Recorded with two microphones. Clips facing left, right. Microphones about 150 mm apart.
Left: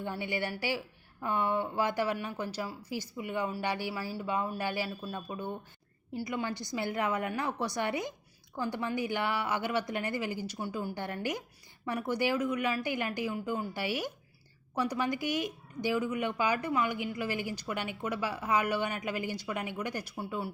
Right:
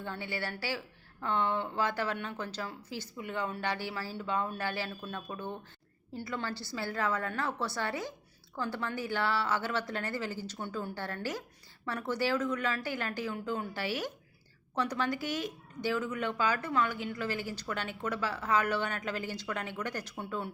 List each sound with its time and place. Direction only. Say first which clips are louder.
0.0 s speech: left 3 dB; 15° left (ahead or behind)